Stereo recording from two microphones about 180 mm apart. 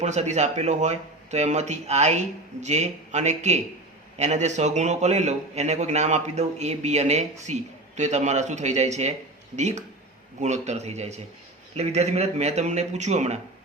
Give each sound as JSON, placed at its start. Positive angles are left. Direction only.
{"t": 0.0, "sound": "a man's voice", "side_deg": -40}